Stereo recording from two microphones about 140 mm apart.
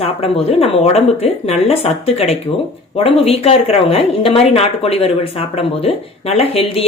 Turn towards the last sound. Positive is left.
turn(degrees=45)  # may be behind; listen again after turning